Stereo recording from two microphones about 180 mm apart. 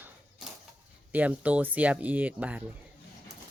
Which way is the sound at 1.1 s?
10° right (ahead or behind).